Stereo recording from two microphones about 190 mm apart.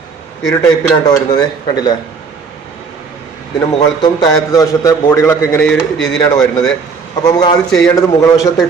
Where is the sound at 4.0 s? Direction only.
20° left (ahead or behind); by 6.7 s centre (ahead or behind).